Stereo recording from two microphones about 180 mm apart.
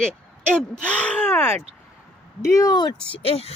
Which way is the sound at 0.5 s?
5° left (ahead or behind).